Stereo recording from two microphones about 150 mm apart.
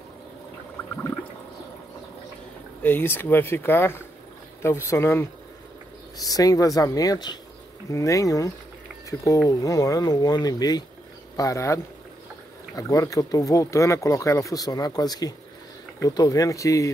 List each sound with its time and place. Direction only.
2.8 s speech: 15° left (ahead or behind)